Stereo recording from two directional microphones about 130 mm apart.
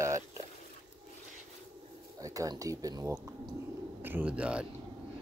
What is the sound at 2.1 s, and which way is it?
Speech, 25° right (ahead or behind).